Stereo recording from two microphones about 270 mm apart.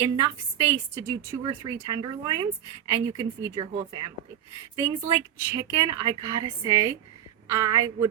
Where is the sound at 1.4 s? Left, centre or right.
Centre.